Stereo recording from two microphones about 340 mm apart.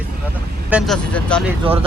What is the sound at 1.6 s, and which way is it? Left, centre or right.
Speech, centre.